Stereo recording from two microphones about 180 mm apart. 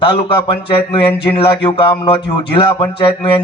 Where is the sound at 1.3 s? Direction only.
30° left (ahead or behind).